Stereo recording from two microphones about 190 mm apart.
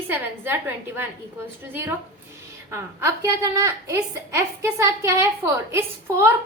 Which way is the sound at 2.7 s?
15° right (ahead or behind).